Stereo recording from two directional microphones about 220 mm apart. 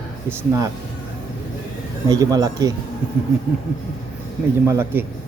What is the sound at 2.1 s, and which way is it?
Speech, 15° right (ahead or behind).